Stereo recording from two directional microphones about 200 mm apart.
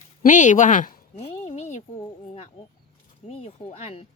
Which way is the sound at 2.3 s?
30° left (ahead or behind).